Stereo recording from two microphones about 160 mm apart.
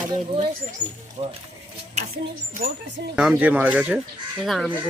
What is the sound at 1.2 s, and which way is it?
Speech, 35° right (ahead or behind).